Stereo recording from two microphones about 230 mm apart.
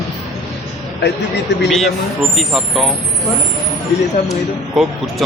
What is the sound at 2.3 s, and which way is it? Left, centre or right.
Speech, centre.